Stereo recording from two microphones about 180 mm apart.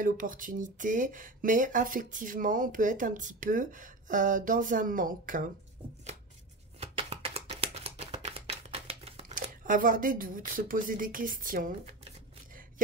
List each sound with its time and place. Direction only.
0.0 s speech: 50° right (ahead or behind)
6.8 s a sound: 35° right (ahead or behind)
9.3 s speech: 50° right (ahead or behind)